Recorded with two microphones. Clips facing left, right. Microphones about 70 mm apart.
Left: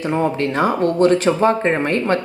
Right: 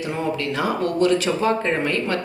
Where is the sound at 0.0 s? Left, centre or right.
Left.